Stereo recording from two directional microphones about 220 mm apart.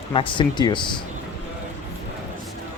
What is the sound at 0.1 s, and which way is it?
Speech, 20° left (ahead or behind).